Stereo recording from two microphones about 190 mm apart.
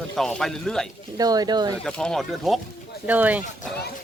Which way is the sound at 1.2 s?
20° right (ahead or behind).